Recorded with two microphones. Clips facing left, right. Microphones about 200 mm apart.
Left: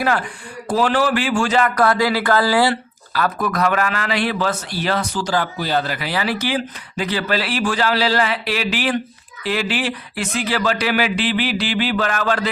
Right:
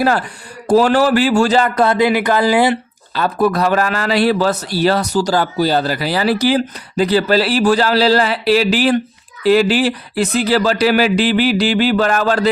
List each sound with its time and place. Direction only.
0.7 s a man's voice: 40° right (ahead or behind)